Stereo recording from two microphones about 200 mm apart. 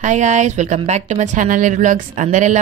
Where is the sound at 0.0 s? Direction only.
35° right (ahead or behind).